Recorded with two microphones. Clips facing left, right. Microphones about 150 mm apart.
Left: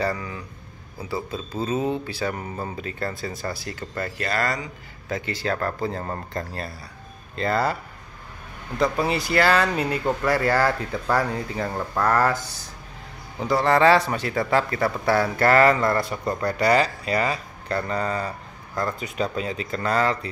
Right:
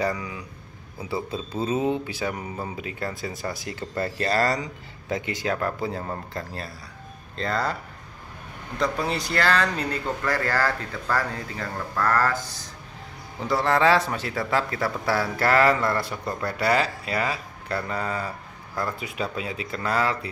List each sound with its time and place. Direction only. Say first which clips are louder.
0.0 s speech: even; 15° right (ahead or behind)
3.9 s a man's voice: right 3 dB; 30° right (ahead or behind)
5.1 s a man's voice: even; 15° right (ahead or behind); by 7.7 s 5° left (ahead or behind)
8.7 s speech: left 3 dB; 5° left (ahead or behind)
13.4 s a man's voice: left 3 dB; centre (ahead or behind)